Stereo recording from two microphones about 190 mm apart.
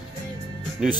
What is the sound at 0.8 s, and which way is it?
Speech, 5° right (ahead or behind).